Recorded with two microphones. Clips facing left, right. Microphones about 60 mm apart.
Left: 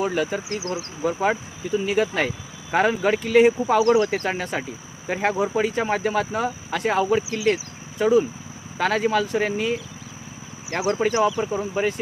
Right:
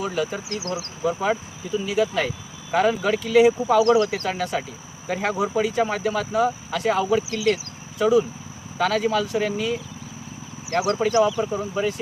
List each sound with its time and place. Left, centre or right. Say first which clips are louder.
0.0 s speech: left 2 dB; left
0.5 s speech: left 1 dB; left
1.0 s speech: left 1 dB; left
4.0 s speech: even; left
7.3 s speech: even; left
11.7 s speech: left 1 dB; left